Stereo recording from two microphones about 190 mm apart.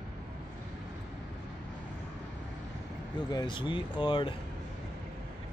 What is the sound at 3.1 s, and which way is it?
Speech, 25° left (ahead or behind).